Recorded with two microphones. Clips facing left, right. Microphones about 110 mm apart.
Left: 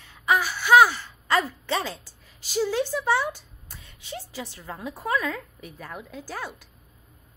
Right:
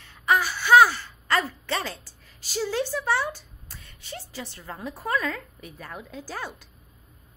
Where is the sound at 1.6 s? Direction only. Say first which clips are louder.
Left 2 dB; 15° left (ahead or behind).